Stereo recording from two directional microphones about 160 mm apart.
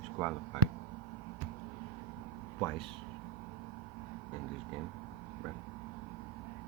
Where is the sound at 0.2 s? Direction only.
5° left (ahead or behind).